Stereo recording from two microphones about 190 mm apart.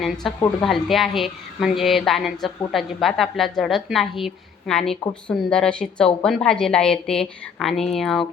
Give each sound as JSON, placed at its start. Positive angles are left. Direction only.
{"t": 0.0, "sound": "a woman's voice", "side_deg": 0}